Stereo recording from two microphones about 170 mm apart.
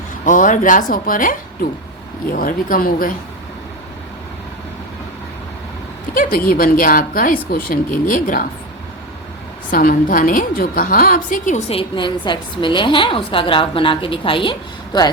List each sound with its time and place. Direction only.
0.3 s a woman's voice: 50° left (ahead or behind)
6.1 s a woman's voice: 60° left (ahead or behind)
9.6 s a woman's voice: 55° left (ahead or behind)
11.7 s a woman's voice: 30° left (ahead or behind)